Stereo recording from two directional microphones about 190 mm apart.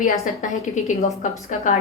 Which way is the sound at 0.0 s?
40° left (ahead or behind).